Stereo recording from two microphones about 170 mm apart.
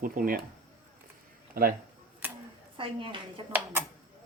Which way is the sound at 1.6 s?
55° right (ahead or behind).